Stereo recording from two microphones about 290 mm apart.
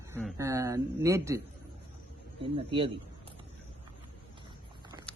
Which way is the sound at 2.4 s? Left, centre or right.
Centre.